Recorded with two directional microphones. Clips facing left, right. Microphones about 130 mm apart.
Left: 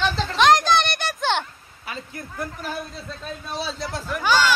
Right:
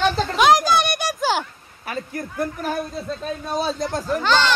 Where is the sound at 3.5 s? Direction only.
45° right (ahead or behind).